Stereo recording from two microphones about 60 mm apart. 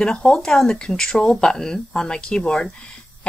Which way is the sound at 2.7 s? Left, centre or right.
Centre.